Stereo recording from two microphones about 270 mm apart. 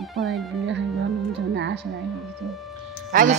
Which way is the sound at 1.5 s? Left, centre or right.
Right.